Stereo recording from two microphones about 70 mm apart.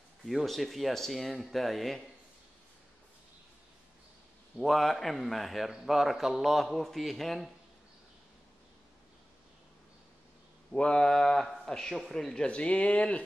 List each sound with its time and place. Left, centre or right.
0.2 s a man's voice: centre
4.6 s a man's voice: centre
10.7 s a man's voice: centre